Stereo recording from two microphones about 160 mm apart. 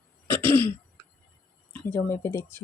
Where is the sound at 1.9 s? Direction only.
15° left (ahead or behind).